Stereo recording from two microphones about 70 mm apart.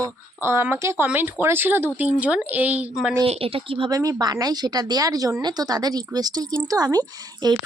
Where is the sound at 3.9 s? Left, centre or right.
Right.